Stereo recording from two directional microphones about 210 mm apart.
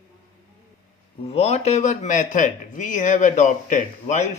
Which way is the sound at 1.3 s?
30° left (ahead or behind).